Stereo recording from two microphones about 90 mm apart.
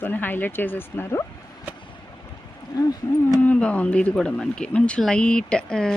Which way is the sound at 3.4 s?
15° left (ahead or behind).